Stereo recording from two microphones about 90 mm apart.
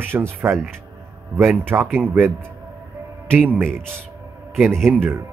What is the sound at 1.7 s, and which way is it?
Speech, 25° right (ahead or behind).